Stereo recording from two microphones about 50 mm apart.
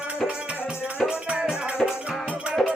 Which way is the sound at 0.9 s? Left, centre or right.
Centre.